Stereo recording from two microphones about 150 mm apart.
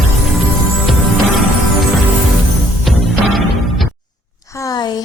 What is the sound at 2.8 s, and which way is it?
Music, centre (ahead or behind).